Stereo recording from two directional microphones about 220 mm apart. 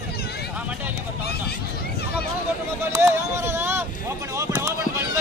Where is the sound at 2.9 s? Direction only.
15° right (ahead or behind).